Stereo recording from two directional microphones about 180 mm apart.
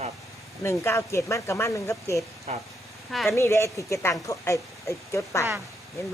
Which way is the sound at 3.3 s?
15° left (ahead or behind).